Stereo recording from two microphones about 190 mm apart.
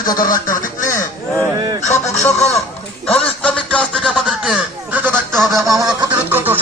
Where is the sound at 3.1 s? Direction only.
5° left (ahead or behind).